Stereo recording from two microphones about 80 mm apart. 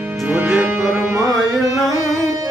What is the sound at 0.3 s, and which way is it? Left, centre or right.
Music, right.